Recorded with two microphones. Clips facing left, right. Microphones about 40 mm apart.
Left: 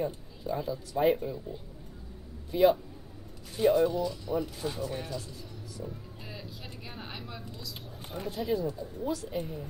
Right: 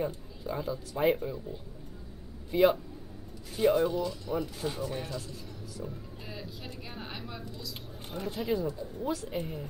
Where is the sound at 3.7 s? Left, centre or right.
Centre.